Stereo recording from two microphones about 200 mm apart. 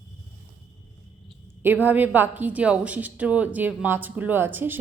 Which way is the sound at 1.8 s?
10° right (ahead or behind).